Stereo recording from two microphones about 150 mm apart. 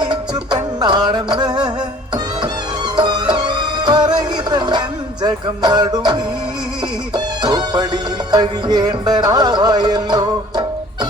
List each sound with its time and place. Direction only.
0.0 s music: 30° right (ahead or behind)
2.9 s music: 30° right (ahead or behind)